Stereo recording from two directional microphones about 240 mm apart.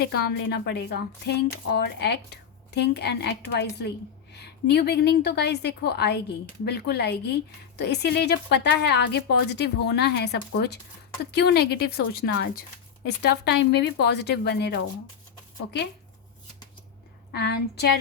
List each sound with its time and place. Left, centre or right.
0.0 s speech: left
17.3 s speech: left